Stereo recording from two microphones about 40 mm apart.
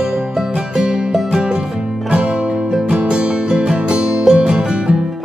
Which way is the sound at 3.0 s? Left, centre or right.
Right.